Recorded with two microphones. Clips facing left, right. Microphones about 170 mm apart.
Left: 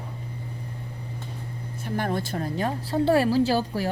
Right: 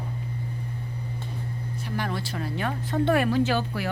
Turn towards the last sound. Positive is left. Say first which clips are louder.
# left 2 dB
turn(degrees=35)  # may be behind; listen again after turning